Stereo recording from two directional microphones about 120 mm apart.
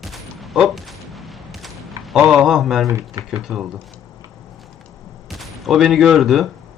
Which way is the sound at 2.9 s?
25° right (ahead or behind).